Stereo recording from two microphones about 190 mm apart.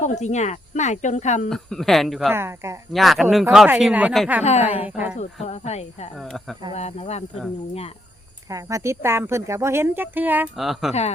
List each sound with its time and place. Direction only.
0.0 s speech: 40° left (ahead or behind)
1.5 s speech: centre (ahead or behind)
2.3 s speech: 15° right (ahead or behind)
2.9 s speech: centre (ahead or behind)
4.4 s speech: 35° left (ahead or behind)
4.9 s speech: 10° right (ahead or behind)
5.1 s speech: 35° left (ahead or behind)
6.1 s speech: centre (ahead or behind)
6.7 s speech: 35° left (ahead or behind)
8.4 s speech: 15° right (ahead or behind); by 10.9 s centre (ahead or behind)